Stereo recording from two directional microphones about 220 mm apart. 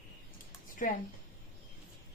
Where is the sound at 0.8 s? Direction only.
35° left (ahead or behind).